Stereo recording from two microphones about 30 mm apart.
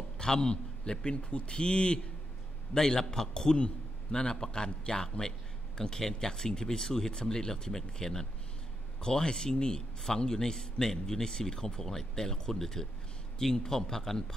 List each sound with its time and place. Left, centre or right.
0.2 s a man's voice: left
2.7 s a man's voice: centre